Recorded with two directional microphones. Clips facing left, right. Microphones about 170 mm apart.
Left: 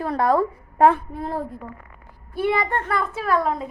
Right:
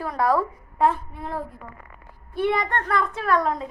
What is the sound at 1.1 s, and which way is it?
Speech, 35° left (ahead or behind).